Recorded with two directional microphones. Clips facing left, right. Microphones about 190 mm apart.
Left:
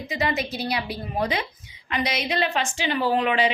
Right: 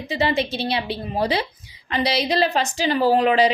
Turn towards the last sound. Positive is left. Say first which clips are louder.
# right 5 dB
turn(degrees=-35)  # may be behind; listen again after turning